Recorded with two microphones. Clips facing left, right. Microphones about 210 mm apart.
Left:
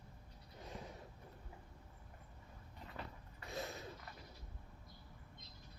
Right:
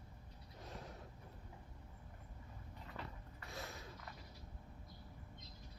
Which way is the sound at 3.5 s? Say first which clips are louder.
Left 5 dB; 20° left (ahead or behind).